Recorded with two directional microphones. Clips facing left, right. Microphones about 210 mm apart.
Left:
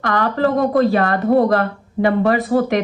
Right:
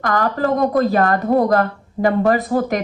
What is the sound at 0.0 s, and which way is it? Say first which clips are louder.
Speech: left 1 dB; 40° right (ahead or behind).